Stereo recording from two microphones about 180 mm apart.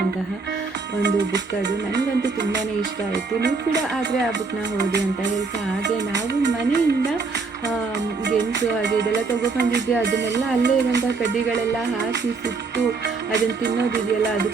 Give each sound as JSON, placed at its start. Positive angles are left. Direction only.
{"t": 2.0, "sound": "music", "side_deg": -75}
{"t": 4.8, "sound": "music", "side_deg": -65}
{"t": 6.1, "sound": "music", "side_deg": -75}
{"t": 8.4, "sound": "music", "side_deg": -75}
{"t": 13.3, "sound": "music", "side_deg": -65}